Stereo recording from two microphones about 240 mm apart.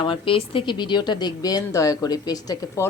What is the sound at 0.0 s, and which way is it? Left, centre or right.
A woman's voice, left.